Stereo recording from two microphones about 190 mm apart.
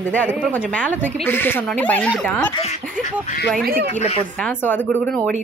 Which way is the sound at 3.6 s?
50° right (ahead or behind).